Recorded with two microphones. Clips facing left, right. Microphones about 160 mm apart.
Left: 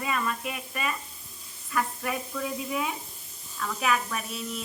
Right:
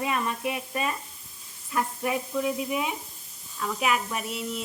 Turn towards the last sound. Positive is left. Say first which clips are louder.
# right 3 dB
turn(degrees=-15)  # may be behind; listen again after turning